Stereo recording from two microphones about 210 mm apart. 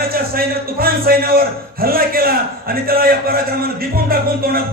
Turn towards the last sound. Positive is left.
turn(degrees=-45)  # may be behind; listen again after turning